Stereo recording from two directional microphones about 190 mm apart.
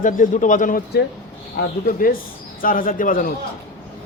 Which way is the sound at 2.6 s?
45° left (ahead or behind).